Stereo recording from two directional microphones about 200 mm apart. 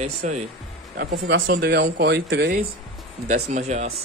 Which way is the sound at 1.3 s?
55° right (ahead or behind).